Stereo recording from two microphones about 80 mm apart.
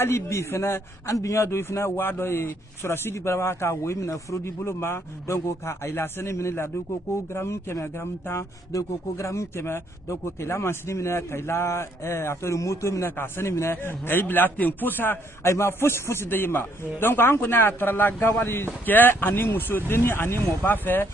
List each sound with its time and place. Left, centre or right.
0.0 s speech: left